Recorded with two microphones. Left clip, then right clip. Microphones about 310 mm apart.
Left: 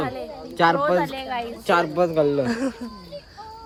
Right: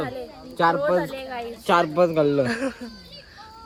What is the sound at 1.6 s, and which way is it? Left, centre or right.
Speech, centre.